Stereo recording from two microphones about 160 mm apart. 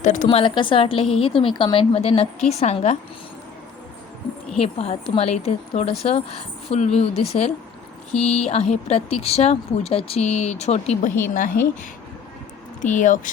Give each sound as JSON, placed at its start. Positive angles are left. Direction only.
{"t": 0.0, "sound": "a woman's voice", "side_deg": 55}
{"t": 0.3, "sound": "a woman's voice", "side_deg": 30}
{"t": 4.6, "sound": "a woman's voice", "side_deg": 40}
{"t": 11.2, "sound": "a woman's voice", "side_deg": 60}
{"t": 12.8, "sound": "speech", "side_deg": 50}